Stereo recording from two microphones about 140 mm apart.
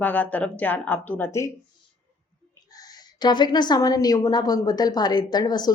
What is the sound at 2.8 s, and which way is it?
A woman's voice, 30° left (ahead or behind).